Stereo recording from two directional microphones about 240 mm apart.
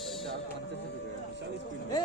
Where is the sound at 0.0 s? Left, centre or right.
Centre.